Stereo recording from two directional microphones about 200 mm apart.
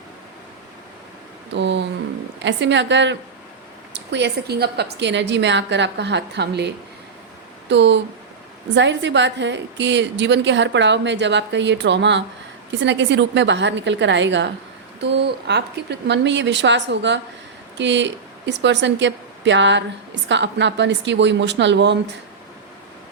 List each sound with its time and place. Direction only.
1.5 s a sound: 60° right (ahead or behind)
2.4 s a woman's voice: 60° right (ahead or behind)
7.7 s a woman's voice: 60° right (ahead or behind)